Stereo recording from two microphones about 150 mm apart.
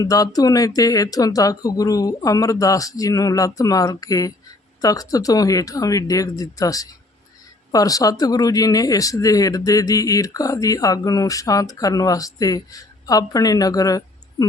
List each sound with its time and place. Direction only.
0.0 s a woman's voice: 25° left (ahead or behind)